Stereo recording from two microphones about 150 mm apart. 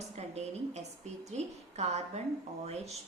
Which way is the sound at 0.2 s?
45° right (ahead or behind).